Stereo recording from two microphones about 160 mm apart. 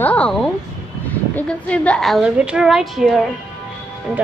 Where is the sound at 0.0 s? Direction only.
10° left (ahead or behind).